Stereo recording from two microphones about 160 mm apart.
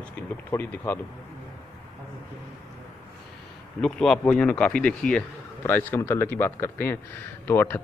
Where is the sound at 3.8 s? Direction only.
5° left (ahead or behind).